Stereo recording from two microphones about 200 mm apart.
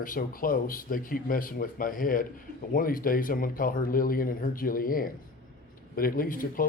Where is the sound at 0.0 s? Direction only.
45° left (ahead or behind).